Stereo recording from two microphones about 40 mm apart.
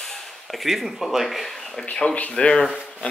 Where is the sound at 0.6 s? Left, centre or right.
Centre.